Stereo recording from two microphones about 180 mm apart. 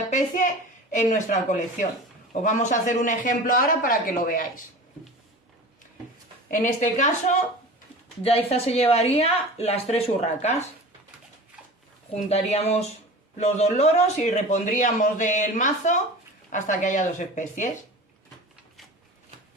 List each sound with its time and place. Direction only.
0.1 s a woman's voice: 45° left (ahead or behind)
6.5 s a man's voice: 45° left (ahead or behind)
8.2 s a man's voice: 35° left (ahead or behind)
12.1 s a man's voice: 35° left (ahead or behind)